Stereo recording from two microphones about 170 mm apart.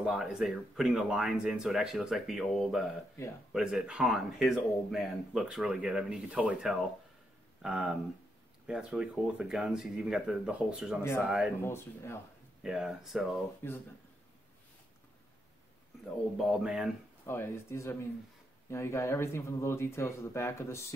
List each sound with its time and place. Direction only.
0.0 s speech: 5° right (ahead or behind)
11.0 s speech: 15° left (ahead or behind)
11.2 s speech: 5° right (ahead or behind)
11.6 s speech: 15° left (ahead or behind)
12.6 s speech: centre (ahead or behind)
13.6 s speech: 15° left (ahead or behind)
16.4 s speech: 5° right (ahead or behind)
17.3 s speech: 15° left (ahead or behind)